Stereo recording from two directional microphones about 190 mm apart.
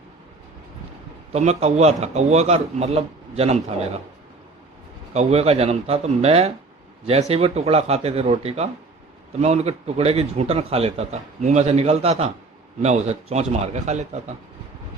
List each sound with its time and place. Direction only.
1.3 s a man's voice: 35° right (ahead or behind)
5.1 s a man's voice: 35° right (ahead or behind)